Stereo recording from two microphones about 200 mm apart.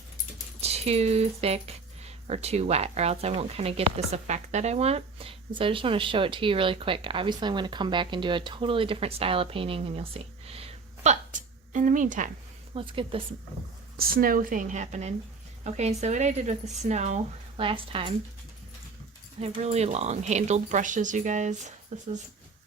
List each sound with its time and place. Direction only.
0.6 s speech: 30° right (ahead or behind)
12.7 s speech: 25° right (ahead or behind)
13.9 s speech: 45° right (ahead or behind); by 18.1 s 25° right (ahead or behind)
19.4 s speech: 35° right (ahead or behind)